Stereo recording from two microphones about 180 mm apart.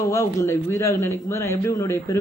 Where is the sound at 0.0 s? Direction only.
15° left (ahead or behind).